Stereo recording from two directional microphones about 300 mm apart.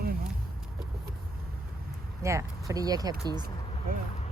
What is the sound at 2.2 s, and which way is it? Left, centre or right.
Speech, centre.